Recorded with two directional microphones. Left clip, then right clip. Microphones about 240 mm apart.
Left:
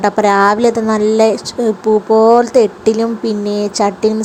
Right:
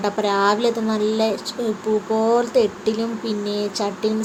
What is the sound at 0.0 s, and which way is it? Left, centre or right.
A woman's voice, left.